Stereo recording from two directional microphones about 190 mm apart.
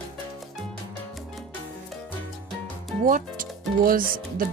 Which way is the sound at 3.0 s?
45° right (ahead or behind).